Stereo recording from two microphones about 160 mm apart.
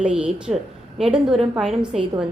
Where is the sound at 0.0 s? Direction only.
5° right (ahead or behind).